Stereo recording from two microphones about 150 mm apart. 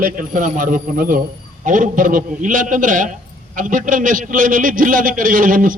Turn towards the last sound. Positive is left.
turn(degrees=-65)  # may be behind; listen again after turning